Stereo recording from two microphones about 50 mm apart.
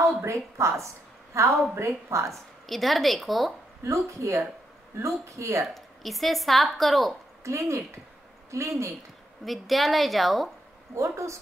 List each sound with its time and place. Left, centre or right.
0.0 s a woman's voice: right
2.6 s speech: centre
3.8 s a woman's voice: right
5.8 s speech: centre
7.4 s a woman's voice: right
9.4 s speech: centre
11.0 s speech: right